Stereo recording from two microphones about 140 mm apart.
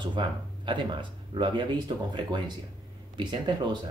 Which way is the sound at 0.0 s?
35° right (ahead or behind).